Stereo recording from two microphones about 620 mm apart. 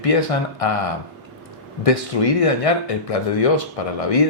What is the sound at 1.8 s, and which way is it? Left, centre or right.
Speech, left.